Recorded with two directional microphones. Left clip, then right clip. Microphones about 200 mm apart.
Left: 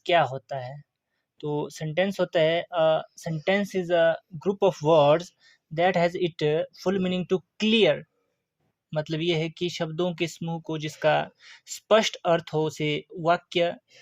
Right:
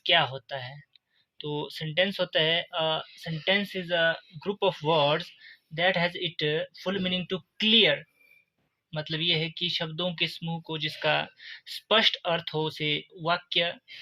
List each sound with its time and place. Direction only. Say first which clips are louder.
0.0 s speech: left 2 dB; 45° left (ahead or behind)